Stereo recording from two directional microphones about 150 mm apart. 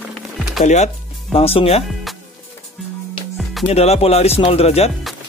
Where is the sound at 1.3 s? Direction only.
40° left (ahead or behind).